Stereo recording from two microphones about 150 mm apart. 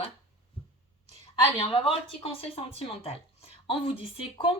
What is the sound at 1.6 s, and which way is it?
Speech, 35° left (ahead or behind).